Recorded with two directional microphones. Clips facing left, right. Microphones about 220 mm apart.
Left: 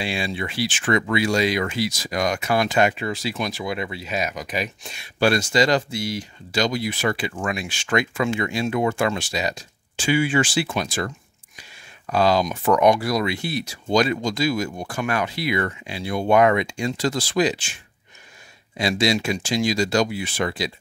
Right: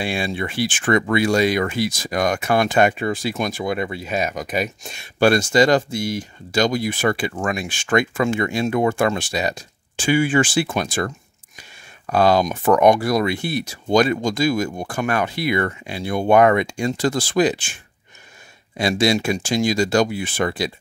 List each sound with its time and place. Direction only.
0.0 s speech: 50° right (ahead or behind)
18.8 s speech: 50° right (ahead or behind)